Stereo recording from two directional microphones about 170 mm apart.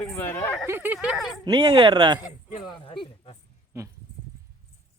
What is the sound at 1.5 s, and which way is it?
Speech, 25° right (ahead or behind).